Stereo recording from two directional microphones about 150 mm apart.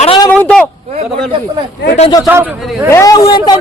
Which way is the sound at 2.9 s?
20° left (ahead or behind).